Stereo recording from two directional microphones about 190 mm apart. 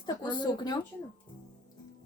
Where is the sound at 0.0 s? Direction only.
25° left (ahead or behind).